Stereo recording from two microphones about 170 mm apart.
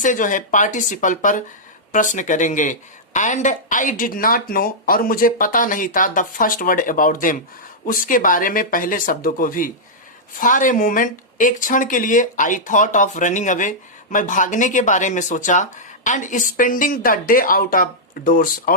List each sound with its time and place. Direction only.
0.0 s speech: 50° left (ahead or behind)